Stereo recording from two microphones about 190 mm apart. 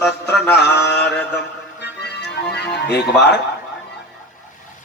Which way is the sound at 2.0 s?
60° left (ahead or behind).